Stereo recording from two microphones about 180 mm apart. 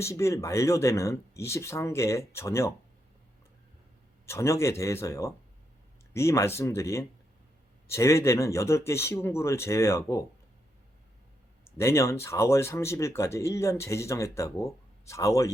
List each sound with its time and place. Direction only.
0.0 s speech: 15° left (ahead or behind)
4.3 s speech: 15° left (ahead or behind)
11.8 s speech: 15° left (ahead or behind)